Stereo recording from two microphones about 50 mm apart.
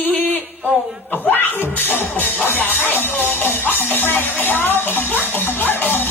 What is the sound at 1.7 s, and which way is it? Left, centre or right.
Music, left.